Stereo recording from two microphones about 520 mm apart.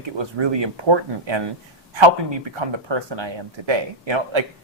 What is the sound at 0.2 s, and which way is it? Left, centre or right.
Speech, right.